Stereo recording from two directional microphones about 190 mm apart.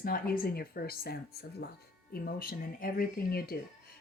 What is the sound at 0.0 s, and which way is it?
Speech, 50° left (ahead or behind).